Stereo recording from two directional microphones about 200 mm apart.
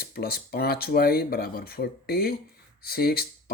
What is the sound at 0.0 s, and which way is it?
Speech, 50° left (ahead or behind).